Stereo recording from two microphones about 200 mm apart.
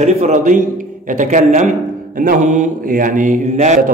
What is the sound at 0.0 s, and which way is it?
A man's voice, 35° right (ahead or behind).